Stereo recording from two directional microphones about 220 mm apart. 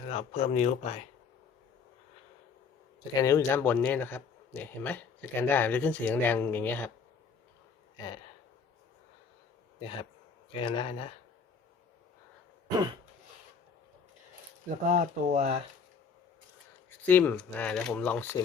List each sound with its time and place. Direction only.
0.1 s speech: 30° left (ahead or behind)
3.2 s speech: 15° left (ahead or behind)
7.9 s speech: 20° left (ahead or behind)
10.5 s speech: 20° left (ahead or behind)
14.8 s speech: 35° right (ahead or behind)
17.1 s speech: 10° left (ahead or behind)